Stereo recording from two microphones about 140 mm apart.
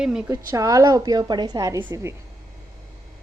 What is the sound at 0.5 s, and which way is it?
A woman's voice, 25° right (ahead or behind).